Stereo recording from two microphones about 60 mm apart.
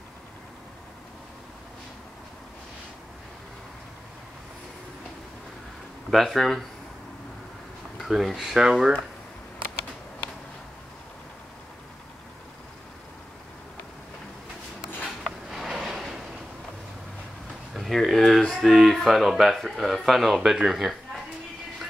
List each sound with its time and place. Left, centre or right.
6.0 s speech: centre
8.0 s speech: centre
8.5 s speech: centre
15.0 s a sound: centre
17.7 s speech: centre